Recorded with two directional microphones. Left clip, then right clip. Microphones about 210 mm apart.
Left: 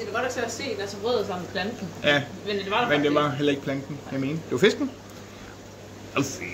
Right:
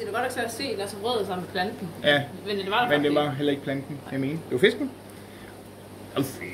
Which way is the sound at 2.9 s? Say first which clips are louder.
Left 1 dB; 15° left (ahead or behind).